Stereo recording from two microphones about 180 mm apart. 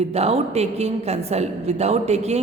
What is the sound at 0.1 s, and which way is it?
A woman's voice, 35° right (ahead or behind).